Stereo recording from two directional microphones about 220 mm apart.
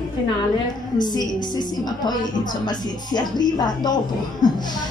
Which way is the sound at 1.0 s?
20° left (ahead or behind).